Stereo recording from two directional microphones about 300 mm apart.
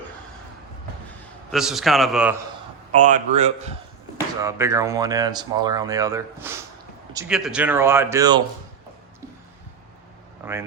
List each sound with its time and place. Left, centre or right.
1.5 s a man's voice: centre
2.9 s speech: right
4.4 s speech: centre